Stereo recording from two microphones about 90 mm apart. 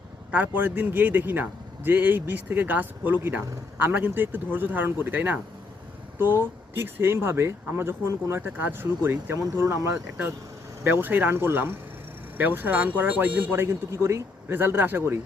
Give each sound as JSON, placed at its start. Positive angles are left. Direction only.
{"t": 0.3, "sound": "a man's voice", "side_deg": -15}